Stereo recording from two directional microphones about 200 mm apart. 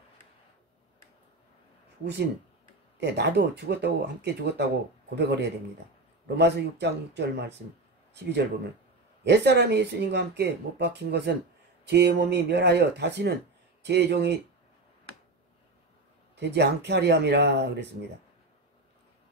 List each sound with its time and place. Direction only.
3.0 s speech: 55° right (ahead or behind)
9.2 s speech: 60° right (ahead or behind)
16.3 s speech: 60° right (ahead or behind)